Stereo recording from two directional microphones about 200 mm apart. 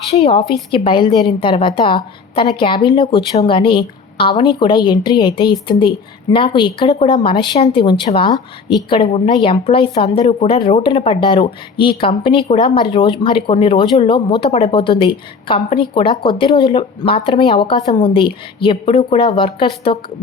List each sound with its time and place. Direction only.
0.1 s a woman's voice: 30° left (ahead or behind)